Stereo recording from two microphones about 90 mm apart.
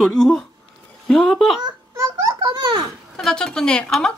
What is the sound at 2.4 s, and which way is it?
Speech, 65° right (ahead or behind).